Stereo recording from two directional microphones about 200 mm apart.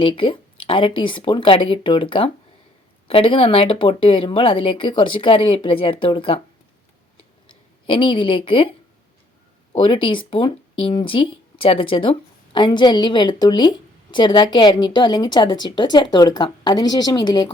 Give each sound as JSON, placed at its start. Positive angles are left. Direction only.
{"t": 0.0, "sound": "a woman's voice", "side_deg": 25}
{"t": 7.9, "sound": "a woman's voice", "side_deg": 25}
{"t": 9.7, "sound": "a woman's voice", "side_deg": 25}